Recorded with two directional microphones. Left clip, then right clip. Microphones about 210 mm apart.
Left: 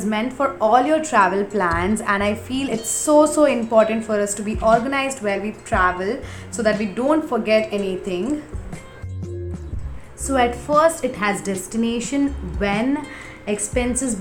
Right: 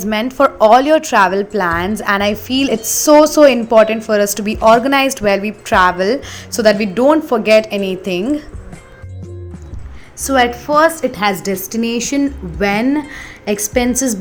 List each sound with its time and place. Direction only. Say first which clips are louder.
0.0 s a woman's voice: right 8 dB; 40° right (ahead or behind)
10.2 s a woman's voice: right 6 dB; 10° right (ahead or behind); by 13.9 s 30° right (ahead or behind)